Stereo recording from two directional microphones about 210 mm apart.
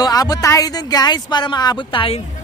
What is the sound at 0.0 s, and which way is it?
Speech, 20° left (ahead or behind).